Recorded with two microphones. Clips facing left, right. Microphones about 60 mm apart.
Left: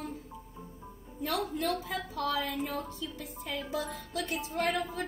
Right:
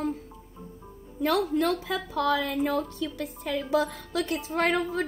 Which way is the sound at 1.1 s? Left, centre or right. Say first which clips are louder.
Right 8 dB; right.